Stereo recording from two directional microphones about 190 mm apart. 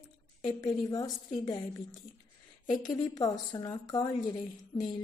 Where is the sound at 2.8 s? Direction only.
20° left (ahead or behind).